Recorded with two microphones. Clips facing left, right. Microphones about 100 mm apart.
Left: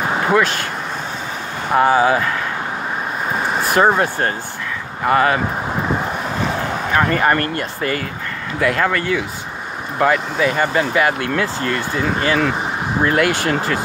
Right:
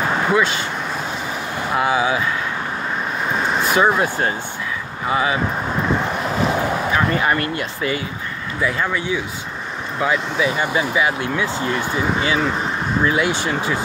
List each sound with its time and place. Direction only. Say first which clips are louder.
0.4 s speech: left 1 dB; 55° left (ahead or behind)
1.7 s speech: left 5 dB; 45° left (ahead or behind)
3.4 s vehicle: right 1 dB; 5° left (ahead or behind)
3.7 s speech: left 3 dB; 45° left (ahead or behind)
5.0 s speech: left 5 dB; 60° left (ahead or behind)
6.9 s speech: left 5 dB; 55° left (ahead or behind)
8.5 s speech: left 4 dB; 80° left
9.9 s speech: left 4 dB; 55° left (ahead or behind)